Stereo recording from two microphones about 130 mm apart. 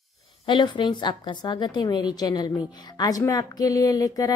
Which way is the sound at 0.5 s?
35° left (ahead or behind).